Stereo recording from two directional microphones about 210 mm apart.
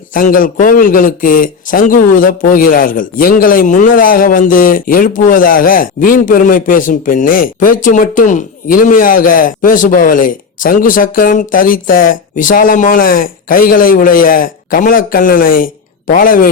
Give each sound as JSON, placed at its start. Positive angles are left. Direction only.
{"t": 0.1, "sound": "speech", "side_deg": 40}